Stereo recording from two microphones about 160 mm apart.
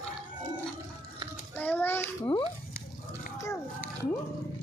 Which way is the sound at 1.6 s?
10° left (ahead or behind).